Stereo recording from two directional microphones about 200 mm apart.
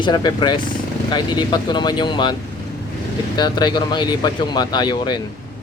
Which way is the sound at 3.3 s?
20° left (ahead or behind).